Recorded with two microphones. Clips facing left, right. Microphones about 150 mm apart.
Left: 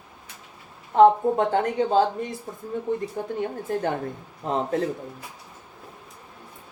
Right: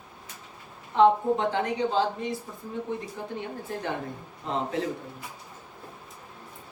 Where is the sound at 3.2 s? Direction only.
50° left (ahead or behind).